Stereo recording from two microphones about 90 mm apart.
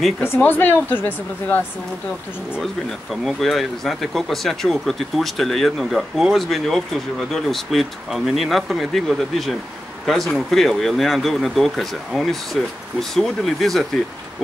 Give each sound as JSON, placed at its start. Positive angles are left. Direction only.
{"t": 0.2, "sound": "speech", "side_deg": 25}
{"t": 2.6, "sound": "speech", "side_deg": 0}